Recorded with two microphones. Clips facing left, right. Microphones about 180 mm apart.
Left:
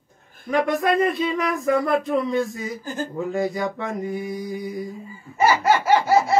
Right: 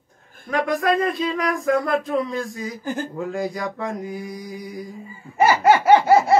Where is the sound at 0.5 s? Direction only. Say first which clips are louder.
Even; centre (ahead or behind).